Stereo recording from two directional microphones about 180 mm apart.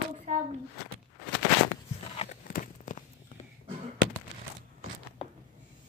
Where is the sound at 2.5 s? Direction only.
45° left (ahead or behind).